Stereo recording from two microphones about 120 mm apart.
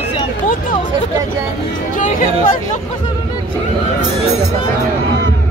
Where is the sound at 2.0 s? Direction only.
90° left.